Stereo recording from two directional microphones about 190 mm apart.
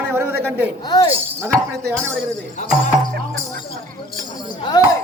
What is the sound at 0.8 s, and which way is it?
Speech, 20° left (ahead or behind).